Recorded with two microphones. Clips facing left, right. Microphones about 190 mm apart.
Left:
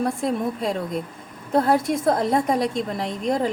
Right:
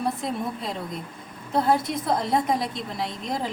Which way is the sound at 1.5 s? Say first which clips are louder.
Left 3 dB; 50° left (ahead or behind).